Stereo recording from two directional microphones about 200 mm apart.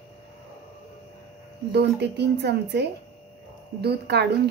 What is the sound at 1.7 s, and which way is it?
Speech, 60° right (ahead or behind).